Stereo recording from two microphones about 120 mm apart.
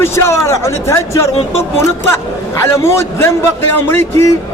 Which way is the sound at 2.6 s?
20° left (ahead or behind).